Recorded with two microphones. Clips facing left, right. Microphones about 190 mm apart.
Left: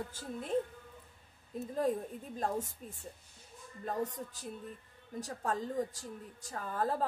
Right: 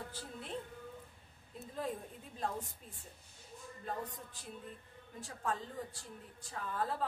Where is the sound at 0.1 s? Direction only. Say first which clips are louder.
Left 8 dB; 45° left (ahead or behind).